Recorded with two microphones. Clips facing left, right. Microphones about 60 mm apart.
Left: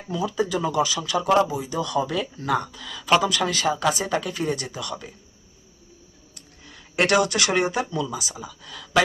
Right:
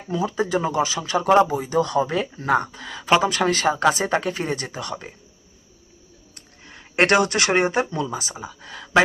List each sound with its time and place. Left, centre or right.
0.1 s speech: right
6.3 s speech: right